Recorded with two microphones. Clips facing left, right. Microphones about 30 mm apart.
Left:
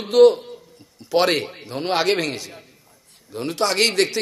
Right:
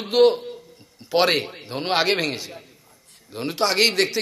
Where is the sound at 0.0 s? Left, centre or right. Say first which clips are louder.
Left 4 dB; centre.